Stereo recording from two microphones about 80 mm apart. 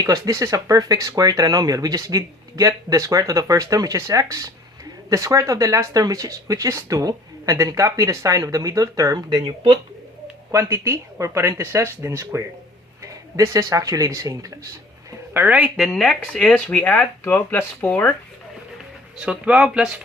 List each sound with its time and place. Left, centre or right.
0.0 s speech: right
9.1 s speech: right
10.5 s speech: right
15.3 s speech: right
15.8 s speech: centre; by 18.1 s left
19.1 s speech: centre